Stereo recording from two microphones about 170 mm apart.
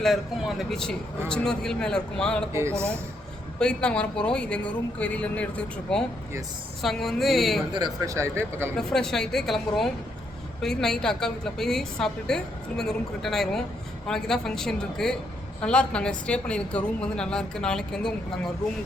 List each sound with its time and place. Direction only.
0.0 s a woman's voice: centre (ahead or behind)
2.5 s speech: 15° right (ahead or behind)
3.6 s a woman's voice: 5° left (ahead or behind)
8.0 s speech: 15° right (ahead or behind)
8.8 s a woman's voice: centre (ahead or behind)